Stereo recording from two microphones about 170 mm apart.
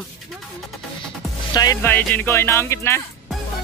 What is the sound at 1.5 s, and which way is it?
Music, 15° left (ahead or behind).